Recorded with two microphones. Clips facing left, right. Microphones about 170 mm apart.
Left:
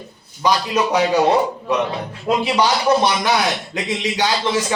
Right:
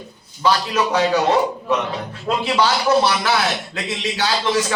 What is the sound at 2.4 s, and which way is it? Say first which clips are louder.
Speech: right 1 dB; 15° left (ahead or behind).